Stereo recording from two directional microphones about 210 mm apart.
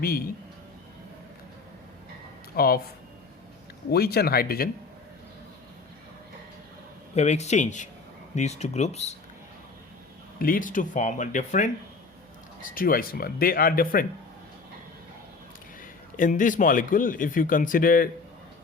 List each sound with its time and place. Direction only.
2.6 s speech: 45° left (ahead or behind)
3.9 s speech: 50° left (ahead or behind)
7.2 s speech: 30° left (ahead or behind)
10.3 s speech: 45° left (ahead or behind)
16.1 s speech: 40° left (ahead or behind)